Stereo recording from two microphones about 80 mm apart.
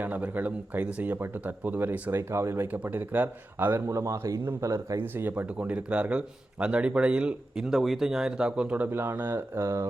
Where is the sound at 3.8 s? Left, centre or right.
Right.